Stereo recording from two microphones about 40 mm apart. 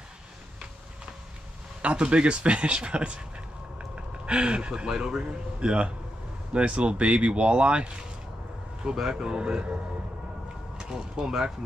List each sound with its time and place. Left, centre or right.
1.8 s speech: right
9.1 s speech: right
11.1 s speech: centre